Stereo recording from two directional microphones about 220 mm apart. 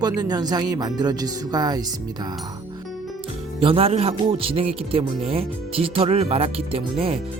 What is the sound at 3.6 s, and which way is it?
Speech, 25° right (ahead or behind).